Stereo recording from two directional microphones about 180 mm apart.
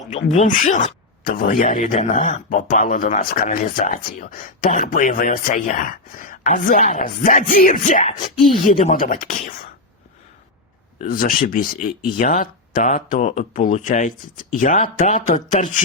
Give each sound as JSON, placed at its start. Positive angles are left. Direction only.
{"t": 0.1, "sound": "speech", "side_deg": 40}
{"t": 11.0, "sound": "speech", "side_deg": 50}